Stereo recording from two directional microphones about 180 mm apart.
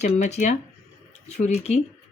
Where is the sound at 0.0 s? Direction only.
40° left (ahead or behind).